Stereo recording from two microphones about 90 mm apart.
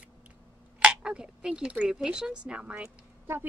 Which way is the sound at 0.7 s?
10° right (ahead or behind).